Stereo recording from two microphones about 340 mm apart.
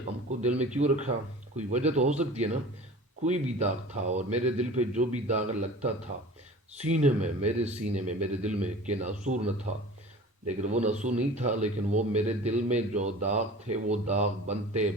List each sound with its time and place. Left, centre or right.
0.3 s speech: right
10.6 s speech: centre